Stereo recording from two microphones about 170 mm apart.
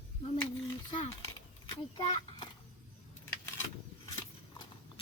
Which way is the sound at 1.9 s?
30° left (ahead or behind).